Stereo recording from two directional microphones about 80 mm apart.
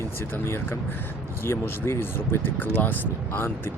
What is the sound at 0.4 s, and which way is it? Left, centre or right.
Speech, left.